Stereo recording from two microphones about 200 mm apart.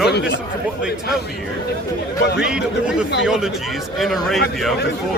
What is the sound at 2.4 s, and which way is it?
Speech, 5° right (ahead or behind).